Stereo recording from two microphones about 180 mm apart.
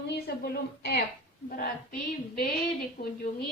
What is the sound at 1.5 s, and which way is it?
Female singing, 55° left (ahead or behind).